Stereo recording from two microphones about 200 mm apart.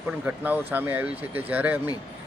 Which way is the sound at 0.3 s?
10° right (ahead or behind).